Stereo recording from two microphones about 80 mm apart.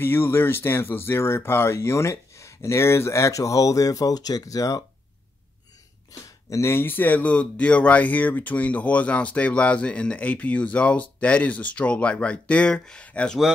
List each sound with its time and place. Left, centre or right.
0.0 s speech: left
6.2 s speech: left; by 13.4 s centre